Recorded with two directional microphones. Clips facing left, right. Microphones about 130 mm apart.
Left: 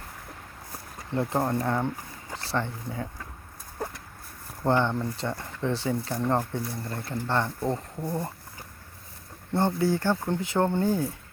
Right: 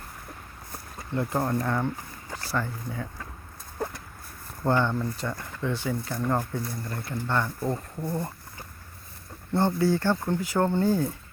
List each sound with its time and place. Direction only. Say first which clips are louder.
1.1 s speech: left 1 dB; 30° left (ahead or behind)
4.6 s speech: even; 20° left (ahead or behind)
8.0 s speech: even; 10° left (ahead or behind)
9.5 s speech: right 1 dB; 15° left (ahead or behind)